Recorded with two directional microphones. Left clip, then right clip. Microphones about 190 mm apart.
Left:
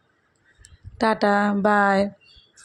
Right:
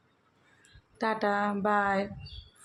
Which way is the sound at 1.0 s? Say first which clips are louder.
Left 9 dB; 30° left (ahead or behind).